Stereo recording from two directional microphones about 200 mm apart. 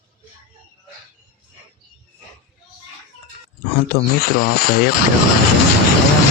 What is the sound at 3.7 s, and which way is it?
Speech, 50° left (ahead or behind).